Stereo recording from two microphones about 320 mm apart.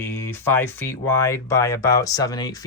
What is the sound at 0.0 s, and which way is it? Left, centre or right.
Speech, centre.